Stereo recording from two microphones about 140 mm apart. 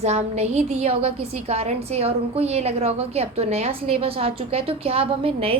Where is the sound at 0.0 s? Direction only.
50° right (ahead or behind).